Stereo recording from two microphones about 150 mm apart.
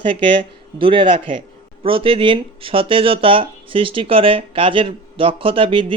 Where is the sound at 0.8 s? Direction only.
35° right (ahead or behind).